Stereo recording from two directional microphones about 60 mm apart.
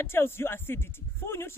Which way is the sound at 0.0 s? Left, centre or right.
Left.